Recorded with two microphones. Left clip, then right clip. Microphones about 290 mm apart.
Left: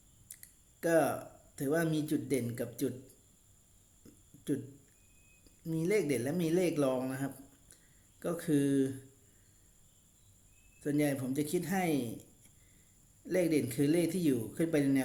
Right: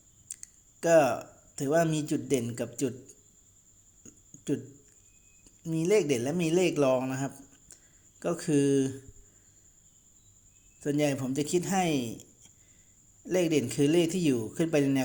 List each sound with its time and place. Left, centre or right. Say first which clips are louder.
0.3 s a sound: right 10 dB; centre
2.0 s a man's voice: right 4 dB; centre
4.0 s a sound: right 3 dB; centre
5.6 s a man's voice: right 6 dB; centre
10.8 s a man's voice: right 4 dB; centre
13.2 s a man's voice: right 4 dB; centre